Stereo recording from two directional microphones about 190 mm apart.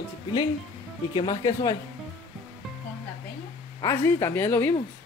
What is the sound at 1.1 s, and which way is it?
Speech, 25° left (ahead or behind).